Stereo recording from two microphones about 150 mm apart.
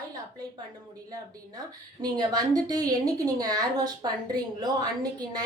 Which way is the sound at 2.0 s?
25° right (ahead or behind).